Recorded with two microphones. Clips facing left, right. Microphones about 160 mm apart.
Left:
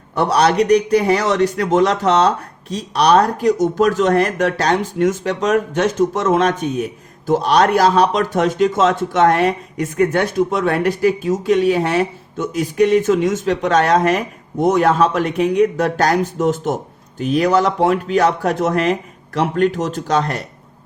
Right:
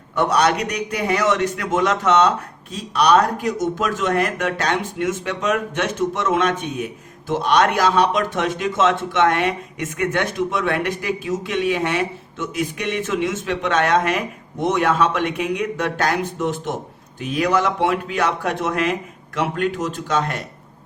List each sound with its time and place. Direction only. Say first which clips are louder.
0.2 s speech: left 4 dB; 30° left (ahead or behind)